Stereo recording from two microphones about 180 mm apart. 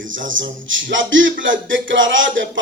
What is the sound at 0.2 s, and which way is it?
Speech, 90° right.